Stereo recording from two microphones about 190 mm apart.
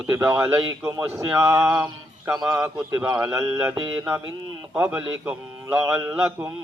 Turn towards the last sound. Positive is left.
turn(degrees=-10)  # may be behind; listen again after turning